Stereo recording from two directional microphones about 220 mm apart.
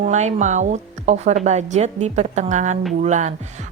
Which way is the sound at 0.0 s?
30° right (ahead or behind).